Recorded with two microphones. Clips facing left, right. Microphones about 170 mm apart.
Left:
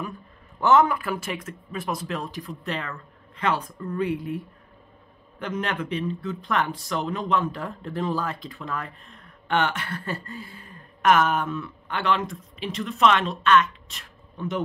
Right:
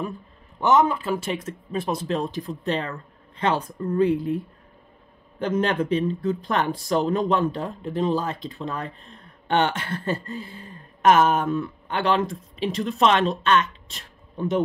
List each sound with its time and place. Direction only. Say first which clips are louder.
0.6 s speech: even; 20° right (ahead or behind)
5.4 s speech: right 6 dB; 30° right (ahead or behind)
7.6 s speech: right 4 dB; 20° right (ahead or behind)
11.4 s speech: right 6 dB; 35° right (ahead or behind)